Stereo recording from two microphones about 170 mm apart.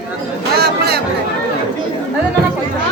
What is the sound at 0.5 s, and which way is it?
Chatter, 70° right (ahead or behind).